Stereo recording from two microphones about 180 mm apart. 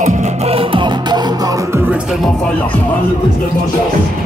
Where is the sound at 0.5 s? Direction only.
30° right (ahead or behind).